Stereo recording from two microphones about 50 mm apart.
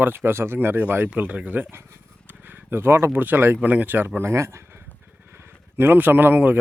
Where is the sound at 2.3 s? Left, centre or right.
Right.